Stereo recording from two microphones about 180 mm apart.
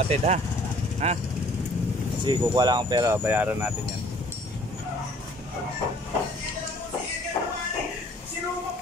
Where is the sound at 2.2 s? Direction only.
25° right (ahead or behind).